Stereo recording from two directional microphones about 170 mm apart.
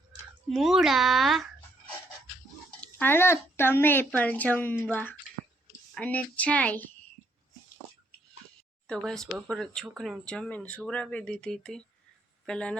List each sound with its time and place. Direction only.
0.5 s speech: centre (ahead or behind)
2.8 s speech: 10° left (ahead or behind)
8.9 s speech: 5° left (ahead or behind)